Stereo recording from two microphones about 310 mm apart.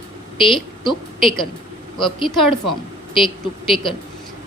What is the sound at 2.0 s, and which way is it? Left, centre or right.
Speech, centre.